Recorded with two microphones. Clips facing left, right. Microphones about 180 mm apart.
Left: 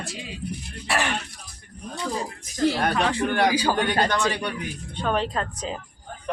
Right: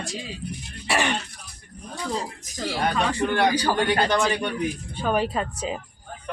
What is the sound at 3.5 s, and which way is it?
Speech, 10° left (ahead or behind).